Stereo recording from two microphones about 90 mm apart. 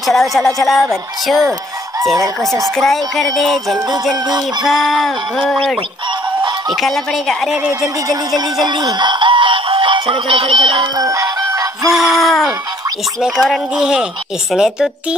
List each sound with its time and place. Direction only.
0.0 s music: centre (ahead or behind)
2.7 s music: 5° left (ahead or behind)
6.7 s music: centre (ahead or behind)
8.6 s speech: 55° right (ahead or behind); by 10.9 s 90° right
11.0 s synthetic singing: 40° right (ahead or behind)
11.9 s music: centre (ahead or behind)
13.2 s speech: 5° right (ahead or behind)